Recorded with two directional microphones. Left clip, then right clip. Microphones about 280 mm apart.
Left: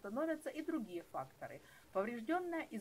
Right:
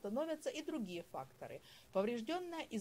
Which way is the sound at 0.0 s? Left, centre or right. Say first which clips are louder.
Even; right.